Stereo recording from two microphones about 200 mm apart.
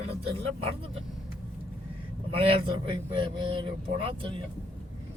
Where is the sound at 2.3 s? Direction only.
30° right (ahead or behind).